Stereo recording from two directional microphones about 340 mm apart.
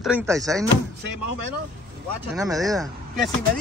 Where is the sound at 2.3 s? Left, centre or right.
Centre.